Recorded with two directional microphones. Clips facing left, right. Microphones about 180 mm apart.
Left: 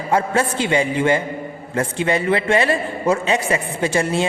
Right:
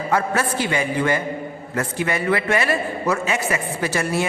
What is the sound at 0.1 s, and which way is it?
A man's voice, 25° left (ahead or behind).